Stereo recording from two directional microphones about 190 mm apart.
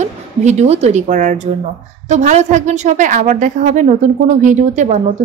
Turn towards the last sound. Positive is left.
turn(degrees=-40)  # may be behind; listen again after turning